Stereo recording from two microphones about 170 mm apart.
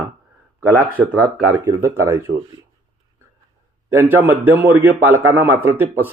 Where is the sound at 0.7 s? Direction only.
10° right (ahead or behind).